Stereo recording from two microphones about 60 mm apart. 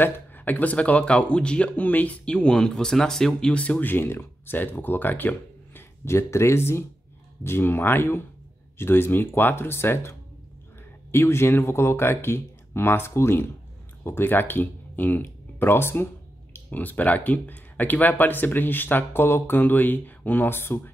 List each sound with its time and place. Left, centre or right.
0.0 s speech: left
1.8 s speech: left
3.9 s speech: left
5.8 s speech: left
16.5 s speech: left